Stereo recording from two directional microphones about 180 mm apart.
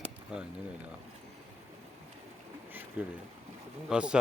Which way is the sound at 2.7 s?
10° right (ahead or behind).